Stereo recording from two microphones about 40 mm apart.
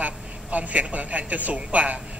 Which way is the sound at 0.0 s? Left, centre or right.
Right.